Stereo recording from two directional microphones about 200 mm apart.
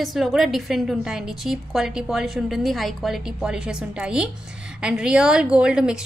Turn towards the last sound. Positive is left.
turn(degrees=-5)  # may be behind; listen again after turning